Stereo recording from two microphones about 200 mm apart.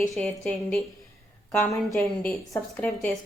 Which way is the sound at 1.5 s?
Centre (ahead or behind).